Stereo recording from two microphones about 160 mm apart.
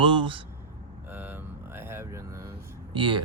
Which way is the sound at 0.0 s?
30° right (ahead or behind).